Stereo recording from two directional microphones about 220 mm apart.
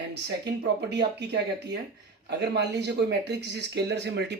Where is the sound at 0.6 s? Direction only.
50° right (ahead or behind).